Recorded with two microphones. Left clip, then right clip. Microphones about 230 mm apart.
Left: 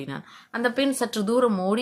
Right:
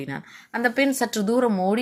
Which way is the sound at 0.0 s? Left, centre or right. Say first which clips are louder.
Right 2 dB; centre.